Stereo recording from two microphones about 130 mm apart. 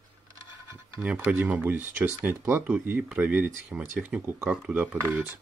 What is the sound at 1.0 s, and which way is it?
Speech, 15° right (ahead or behind).